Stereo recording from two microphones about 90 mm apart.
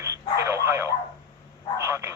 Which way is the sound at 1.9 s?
30° right (ahead or behind).